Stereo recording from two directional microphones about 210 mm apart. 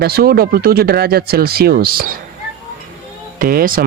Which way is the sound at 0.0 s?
45° right (ahead or behind).